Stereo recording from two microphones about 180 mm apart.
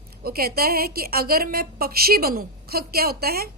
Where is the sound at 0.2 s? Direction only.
60° right (ahead or behind).